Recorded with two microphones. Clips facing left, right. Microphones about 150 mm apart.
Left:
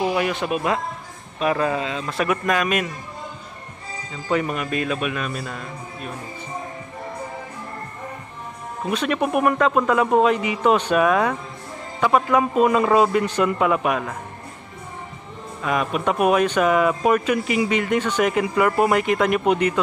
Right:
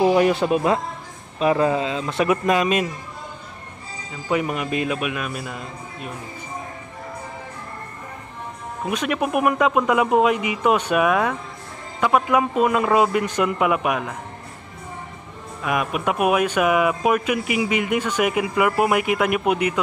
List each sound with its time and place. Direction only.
0.0 s speech: 35° right (ahead or behind)
4.1 s speech: 15° right (ahead or behind)
8.8 s speech: 10° right (ahead or behind)
15.6 s speech: 10° right (ahead or behind)